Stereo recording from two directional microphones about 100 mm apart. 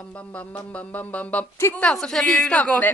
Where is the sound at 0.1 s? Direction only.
15° left (ahead or behind).